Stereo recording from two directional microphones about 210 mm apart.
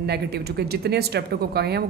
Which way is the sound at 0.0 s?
50° right (ahead or behind).